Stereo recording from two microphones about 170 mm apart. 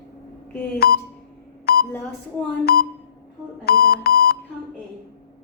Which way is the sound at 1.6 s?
65° left (ahead or behind).